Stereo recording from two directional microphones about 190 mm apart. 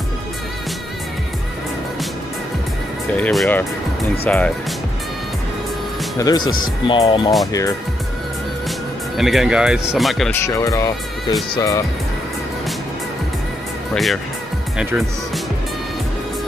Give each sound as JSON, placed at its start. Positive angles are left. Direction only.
{"t": 3.2, "sound": "speech", "side_deg": 5}
{"t": 6.1, "sound": "speech", "side_deg": 20}
{"t": 9.1, "sound": "speech", "side_deg": 0}
{"t": 10.3, "sound": "speech", "side_deg": 15}
{"t": 13.9, "sound": "speech", "side_deg": 0}